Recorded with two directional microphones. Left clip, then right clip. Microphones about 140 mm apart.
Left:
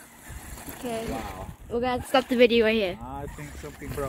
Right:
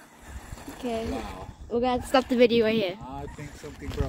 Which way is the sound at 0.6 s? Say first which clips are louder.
Right 1 dB; 65° right (ahead or behind).